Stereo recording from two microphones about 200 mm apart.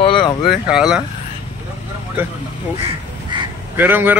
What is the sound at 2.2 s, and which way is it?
Speech, 10° right (ahead or behind).